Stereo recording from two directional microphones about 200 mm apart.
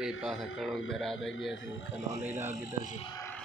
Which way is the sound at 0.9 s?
Centre (ahead or behind).